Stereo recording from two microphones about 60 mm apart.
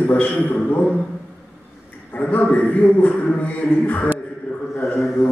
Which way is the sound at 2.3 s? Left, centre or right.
Left.